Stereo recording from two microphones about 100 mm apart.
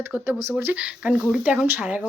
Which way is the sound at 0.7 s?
10° right (ahead or behind).